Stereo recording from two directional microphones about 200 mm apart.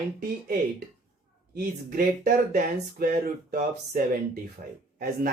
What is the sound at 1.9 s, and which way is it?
Speech, 50° right (ahead or behind).